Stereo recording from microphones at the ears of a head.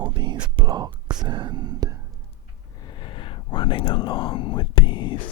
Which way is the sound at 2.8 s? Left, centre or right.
Left.